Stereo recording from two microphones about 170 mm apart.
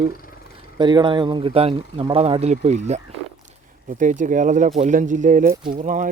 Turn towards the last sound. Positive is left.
turn(degrees=-50)  # may be behind; listen again after turning